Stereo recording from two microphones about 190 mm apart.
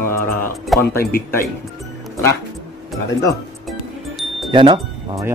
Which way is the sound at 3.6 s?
Centre (ahead or behind).